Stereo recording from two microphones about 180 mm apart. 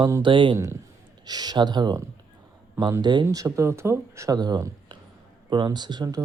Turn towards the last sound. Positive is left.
turn(degrees=-20)  # may be behind; listen again after turning